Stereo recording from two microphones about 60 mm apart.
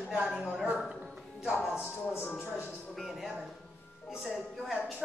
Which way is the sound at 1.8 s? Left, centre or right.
Left.